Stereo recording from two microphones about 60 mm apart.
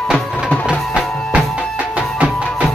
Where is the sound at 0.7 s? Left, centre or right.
Centre.